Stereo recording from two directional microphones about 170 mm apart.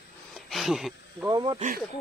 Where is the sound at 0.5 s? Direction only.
Centre (ahead or behind).